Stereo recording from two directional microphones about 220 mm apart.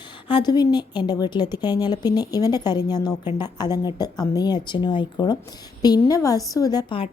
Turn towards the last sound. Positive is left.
turn(degrees=20)  # may be behind; listen again after turning